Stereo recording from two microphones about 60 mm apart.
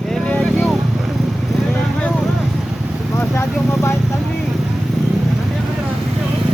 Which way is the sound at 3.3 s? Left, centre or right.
Left.